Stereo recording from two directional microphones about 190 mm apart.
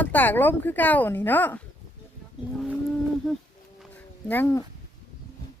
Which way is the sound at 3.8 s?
10° left (ahead or behind).